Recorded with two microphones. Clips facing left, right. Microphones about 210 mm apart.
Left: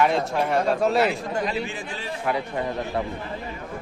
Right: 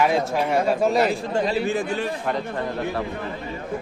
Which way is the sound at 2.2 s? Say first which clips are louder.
Even; 10° left (ahead or behind).